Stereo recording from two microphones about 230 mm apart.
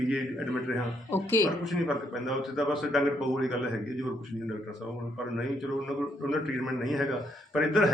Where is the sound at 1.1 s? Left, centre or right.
Centre.